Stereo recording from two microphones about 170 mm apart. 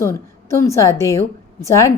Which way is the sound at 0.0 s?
15° left (ahead or behind).